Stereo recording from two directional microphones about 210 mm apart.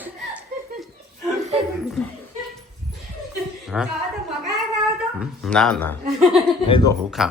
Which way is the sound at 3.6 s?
5° right (ahead or behind).